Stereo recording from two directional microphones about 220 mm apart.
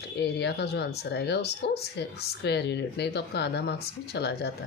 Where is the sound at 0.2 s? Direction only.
50° left (ahead or behind).